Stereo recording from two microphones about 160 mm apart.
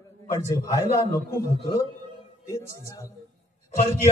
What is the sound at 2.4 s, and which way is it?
Speech, 20° left (ahead or behind).